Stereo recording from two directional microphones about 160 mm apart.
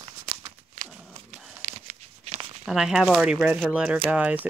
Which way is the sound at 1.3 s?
45° right (ahead or behind).